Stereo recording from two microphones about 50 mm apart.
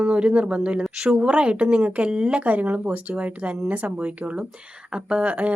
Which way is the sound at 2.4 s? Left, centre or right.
Right.